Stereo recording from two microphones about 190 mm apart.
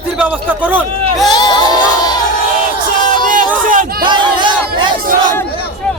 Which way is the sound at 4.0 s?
25° right (ahead or behind).